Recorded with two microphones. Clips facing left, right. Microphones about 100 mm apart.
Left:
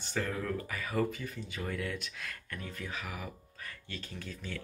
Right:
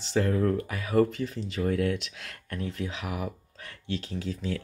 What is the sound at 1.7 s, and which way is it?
Speech, 75° right (ahead or behind).